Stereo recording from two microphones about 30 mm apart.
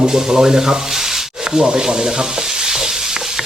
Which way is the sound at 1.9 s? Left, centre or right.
Right.